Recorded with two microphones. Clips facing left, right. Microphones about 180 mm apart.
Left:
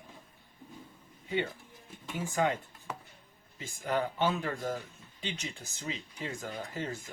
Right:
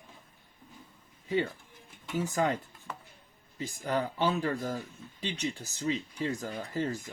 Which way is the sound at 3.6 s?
35° right (ahead or behind).